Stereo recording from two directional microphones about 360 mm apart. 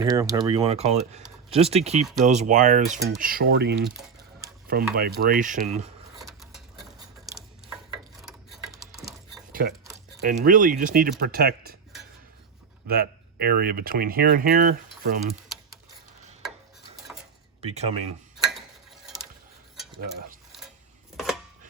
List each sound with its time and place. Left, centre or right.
0.0 s speech: centre
6.2 s a sound: centre
8.2 s mechanisms: centre
10.2 s speech: right
12.9 s speech: right
17.1 s dishes: centre
17.7 s speech: centre
20.0 s cutlery: right